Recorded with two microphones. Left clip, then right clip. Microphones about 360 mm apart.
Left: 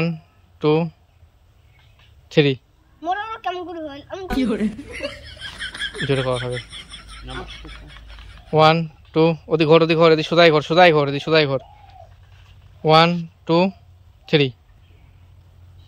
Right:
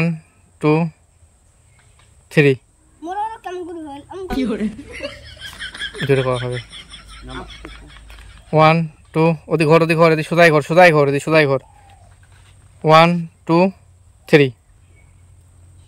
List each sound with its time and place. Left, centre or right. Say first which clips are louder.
0.0 s a sound: right 2 dB; centre
2.2 s speech: right 3 dB; centre
3.3 s speech: left 2 dB; centre
6.0 s speech: right 5 dB; centre
6.3 s a sound: right 1 dB; centre
8.5 s speech: right 2 dB; centre
12.8 s speech: right 3 dB; centre